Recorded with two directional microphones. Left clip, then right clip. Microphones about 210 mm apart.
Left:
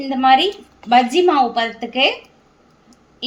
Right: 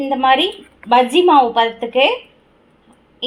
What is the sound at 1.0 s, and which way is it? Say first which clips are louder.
Speech: right 3 dB; 20° right (ahead or behind).